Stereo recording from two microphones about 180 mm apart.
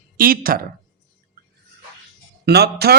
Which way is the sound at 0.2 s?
55° right (ahead or behind).